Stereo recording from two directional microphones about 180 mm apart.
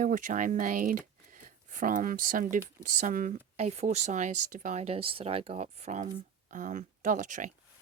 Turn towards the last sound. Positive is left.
turn(degrees=-45)  # may be behind; listen again after turning